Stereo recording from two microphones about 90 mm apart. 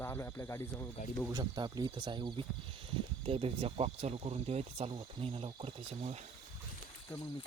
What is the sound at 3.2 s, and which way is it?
Speech, 90° right.